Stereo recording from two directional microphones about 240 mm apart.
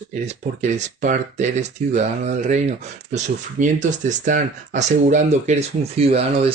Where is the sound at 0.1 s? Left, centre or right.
Right.